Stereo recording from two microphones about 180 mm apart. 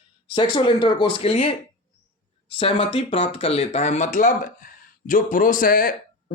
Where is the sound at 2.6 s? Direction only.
30° left (ahead or behind).